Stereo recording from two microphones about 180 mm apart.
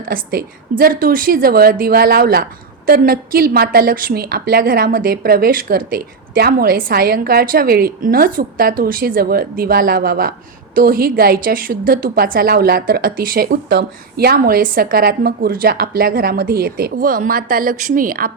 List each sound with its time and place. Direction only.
0.1 s a woman's voice: 55° right (ahead or behind)